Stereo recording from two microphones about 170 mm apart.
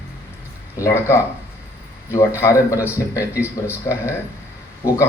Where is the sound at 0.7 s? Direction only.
15° left (ahead or behind).